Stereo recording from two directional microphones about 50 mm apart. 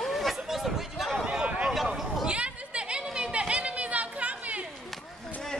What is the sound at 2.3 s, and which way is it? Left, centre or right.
Chatter, right.